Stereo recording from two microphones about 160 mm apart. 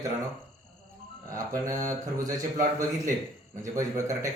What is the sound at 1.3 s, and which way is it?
A man's voice, 20° right (ahead or behind).